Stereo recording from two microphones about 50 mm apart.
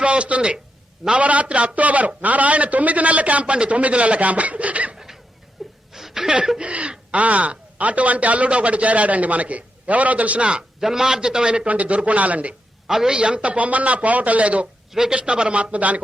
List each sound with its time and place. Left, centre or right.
0.0 s a man's voice: right
5.9 s a sound: centre
6.2 s a man's voice: centre
10.8 s a man's voice: centre; by 12.5 s right
12.9 s speech: centre
13.1 s a man's voice: right
14.9 s a man's voice: centre